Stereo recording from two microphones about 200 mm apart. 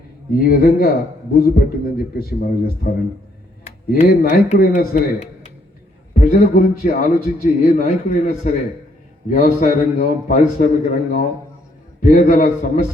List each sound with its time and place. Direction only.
0.3 s a man's voice: 50° left (ahead or behind)
4.0 s a man's voice: 50° left (ahead or behind)
9.3 s a man's voice: 40° left (ahead or behind)